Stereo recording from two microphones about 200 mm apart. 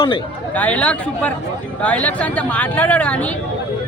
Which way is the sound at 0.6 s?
5° left (ahead or behind).